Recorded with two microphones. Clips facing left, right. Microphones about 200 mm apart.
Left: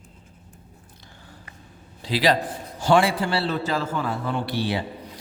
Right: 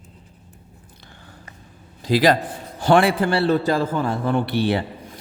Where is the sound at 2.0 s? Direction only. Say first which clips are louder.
Right 4 dB; 45° right (ahead or behind).